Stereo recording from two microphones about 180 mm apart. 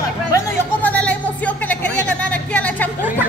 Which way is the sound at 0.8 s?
10° left (ahead or behind).